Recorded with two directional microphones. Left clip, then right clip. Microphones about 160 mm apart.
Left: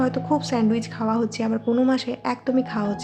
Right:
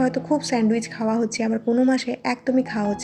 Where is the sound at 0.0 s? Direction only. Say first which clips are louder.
Right 1 dB; 10° right (ahead or behind).